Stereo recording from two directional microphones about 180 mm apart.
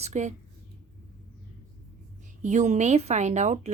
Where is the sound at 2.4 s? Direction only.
40° right (ahead or behind).